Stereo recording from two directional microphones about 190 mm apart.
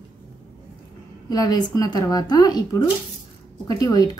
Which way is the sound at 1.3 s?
20° left (ahead or behind).